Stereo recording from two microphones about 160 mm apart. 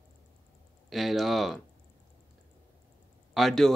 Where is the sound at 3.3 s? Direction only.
Centre (ahead or behind).